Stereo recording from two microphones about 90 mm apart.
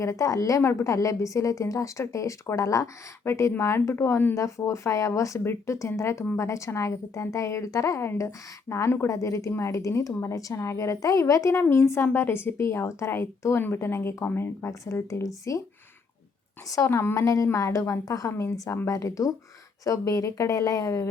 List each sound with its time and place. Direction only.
0.0 s a woman's voice: 35° left (ahead or behind)
16.6 s a woman's voice: 35° left (ahead or behind)